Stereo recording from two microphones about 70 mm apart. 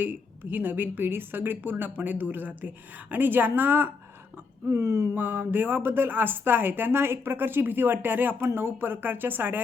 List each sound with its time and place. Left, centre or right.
0.0 s a woman's voice: right
4.7 s speech: right
5.1 s a woman's voice: right